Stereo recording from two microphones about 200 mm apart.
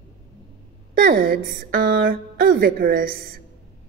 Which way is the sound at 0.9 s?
50° right (ahead or behind).